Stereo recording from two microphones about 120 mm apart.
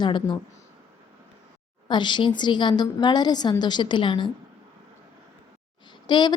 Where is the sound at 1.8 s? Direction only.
40° left (ahead or behind).